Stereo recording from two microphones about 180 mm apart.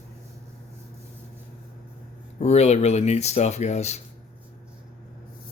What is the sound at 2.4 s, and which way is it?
Speech, 35° left (ahead or behind).